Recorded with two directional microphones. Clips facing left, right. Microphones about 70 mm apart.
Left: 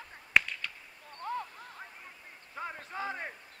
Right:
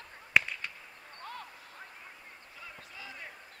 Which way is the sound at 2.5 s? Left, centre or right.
Left.